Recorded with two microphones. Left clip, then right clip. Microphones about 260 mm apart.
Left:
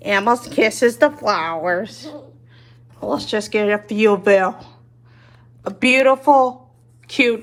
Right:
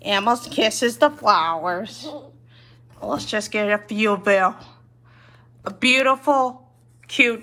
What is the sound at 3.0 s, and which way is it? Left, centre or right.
A woman's voice, centre.